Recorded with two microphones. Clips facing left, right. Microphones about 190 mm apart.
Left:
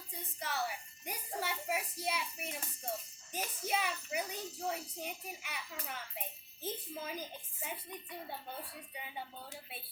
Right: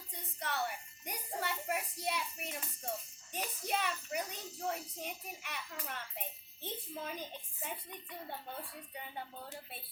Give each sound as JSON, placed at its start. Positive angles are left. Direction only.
{"t": 0.1, "sound": "music", "side_deg": 0}
{"t": 3.3, "sound": "a child's voice", "side_deg": 0}